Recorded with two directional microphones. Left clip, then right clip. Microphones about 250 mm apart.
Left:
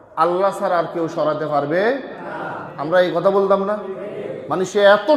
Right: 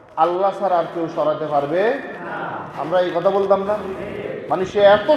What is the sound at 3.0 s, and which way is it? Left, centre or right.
A man's voice, left.